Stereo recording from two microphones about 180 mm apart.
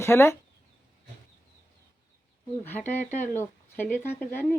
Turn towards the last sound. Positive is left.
turn(degrees=10)  # may be behind; listen again after turning